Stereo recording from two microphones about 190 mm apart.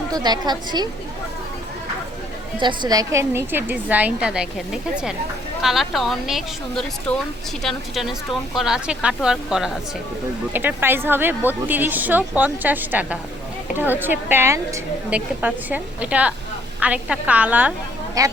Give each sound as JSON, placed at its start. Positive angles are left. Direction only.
{"t": 0.1, "sound": "a woman's voice", "side_deg": -20}
{"t": 2.6, "sound": "a woman's voice", "side_deg": -25}